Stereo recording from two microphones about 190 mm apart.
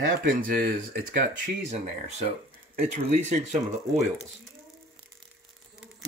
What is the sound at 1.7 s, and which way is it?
Speech, 35° right (ahead or behind).